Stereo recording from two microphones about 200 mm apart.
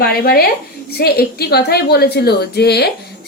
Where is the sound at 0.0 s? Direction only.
50° left (ahead or behind).